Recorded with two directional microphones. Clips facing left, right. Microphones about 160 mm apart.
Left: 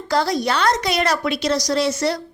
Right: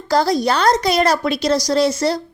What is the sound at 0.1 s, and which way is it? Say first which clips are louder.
A woman's voice: right 4 dB; 35° right (ahead or behind).